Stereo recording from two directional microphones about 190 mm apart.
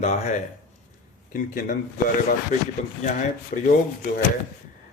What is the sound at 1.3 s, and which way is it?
A man's voice, 45° left (ahead or behind).